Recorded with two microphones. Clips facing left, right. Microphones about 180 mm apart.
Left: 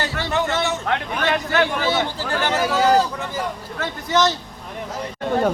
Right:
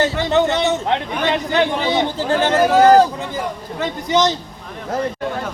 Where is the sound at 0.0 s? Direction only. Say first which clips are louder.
Right 7 dB; 25° right (ahead or behind).